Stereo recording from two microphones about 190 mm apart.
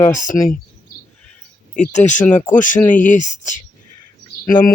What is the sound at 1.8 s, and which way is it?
Speech, 40° left (ahead or behind).